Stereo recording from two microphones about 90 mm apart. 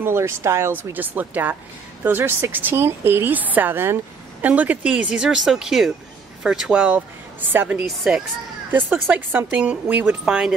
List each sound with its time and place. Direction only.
0.0 s speech: 30° right (ahead or behind)
0.9 s a woman's voice: 20° right (ahead or behind)